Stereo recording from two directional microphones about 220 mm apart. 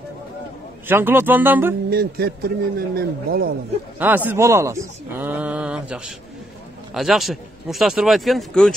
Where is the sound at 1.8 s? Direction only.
45° right (ahead or behind).